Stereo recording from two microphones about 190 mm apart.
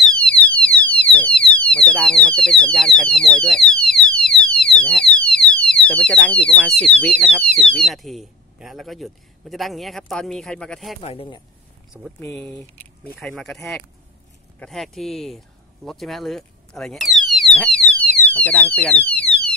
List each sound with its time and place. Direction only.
0.0 s speech: 5° left (ahead or behind)
11.0 s speech: 30° left (ahead or behind)
12.2 s speech: 10° left (ahead or behind)